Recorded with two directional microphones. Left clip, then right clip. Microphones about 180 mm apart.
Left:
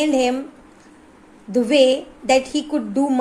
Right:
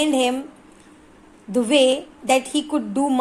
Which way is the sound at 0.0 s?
15° right (ahead or behind).